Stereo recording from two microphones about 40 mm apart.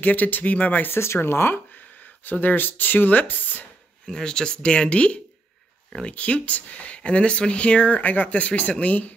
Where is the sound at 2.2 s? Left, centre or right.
Left.